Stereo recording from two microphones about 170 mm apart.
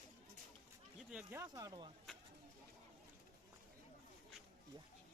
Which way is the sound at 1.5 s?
25° right (ahead or behind).